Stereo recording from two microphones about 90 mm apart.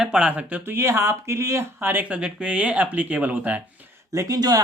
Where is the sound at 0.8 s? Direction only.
35° right (ahead or behind); by 3.6 s 15° right (ahead or behind).